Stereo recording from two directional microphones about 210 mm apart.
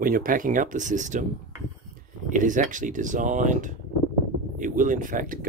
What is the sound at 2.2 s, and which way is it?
Speech, 35° right (ahead or behind).